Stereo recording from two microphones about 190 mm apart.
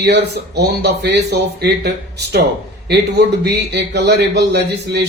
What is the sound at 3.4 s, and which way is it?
Speech, 60° right (ahead or behind).